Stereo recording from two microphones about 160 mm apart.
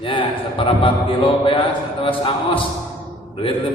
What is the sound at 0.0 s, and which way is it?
A man's voice, 30° left (ahead or behind).